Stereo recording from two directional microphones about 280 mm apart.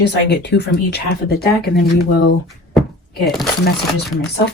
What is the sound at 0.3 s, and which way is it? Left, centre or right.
Speech, left.